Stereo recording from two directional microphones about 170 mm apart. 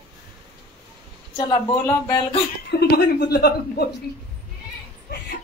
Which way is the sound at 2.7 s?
70° left (ahead or behind).